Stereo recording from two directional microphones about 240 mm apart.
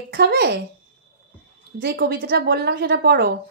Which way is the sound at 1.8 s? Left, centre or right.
Right.